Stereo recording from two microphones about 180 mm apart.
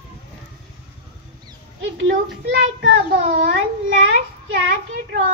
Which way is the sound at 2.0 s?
85° right.